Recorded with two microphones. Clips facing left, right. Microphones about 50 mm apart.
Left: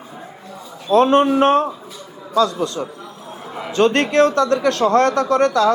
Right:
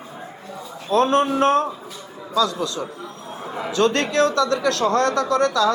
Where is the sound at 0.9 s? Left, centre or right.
Left.